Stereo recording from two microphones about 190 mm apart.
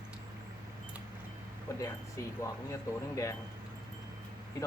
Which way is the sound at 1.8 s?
15° left (ahead or behind).